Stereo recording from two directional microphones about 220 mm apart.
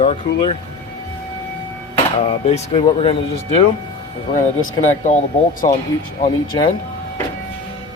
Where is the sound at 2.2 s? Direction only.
30° left (ahead or behind).